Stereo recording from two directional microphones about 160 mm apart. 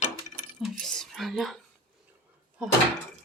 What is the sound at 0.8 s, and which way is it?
Speech, 5° left (ahead or behind).